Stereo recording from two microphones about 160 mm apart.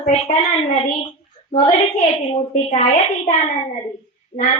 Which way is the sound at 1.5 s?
50° left (ahead or behind).